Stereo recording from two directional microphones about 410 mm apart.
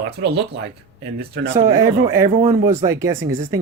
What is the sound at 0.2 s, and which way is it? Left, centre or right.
Speech, right.